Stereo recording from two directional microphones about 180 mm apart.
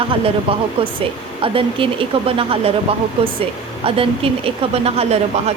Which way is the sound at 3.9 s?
30° right (ahead or behind).